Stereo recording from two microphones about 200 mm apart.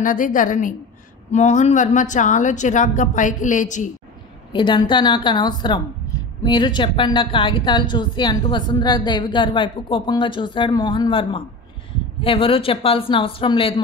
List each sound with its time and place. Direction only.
0.0 s a woman's voice: 40° left (ahead or behind)
4.5 s a woman's voice: 20° left (ahead or behind)